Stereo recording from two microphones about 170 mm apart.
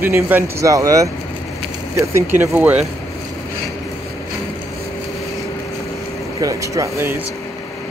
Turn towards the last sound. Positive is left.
turn(degrees=-15)  # may be behind; listen again after turning